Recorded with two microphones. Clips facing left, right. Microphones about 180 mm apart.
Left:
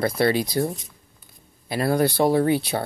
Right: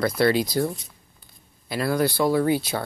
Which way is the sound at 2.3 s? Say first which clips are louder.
Left 1 dB; 25° left (ahead or behind).